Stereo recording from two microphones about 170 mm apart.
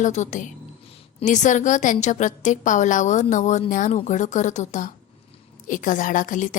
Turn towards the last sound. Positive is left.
turn(degrees=50)  # may be behind; listen again after turning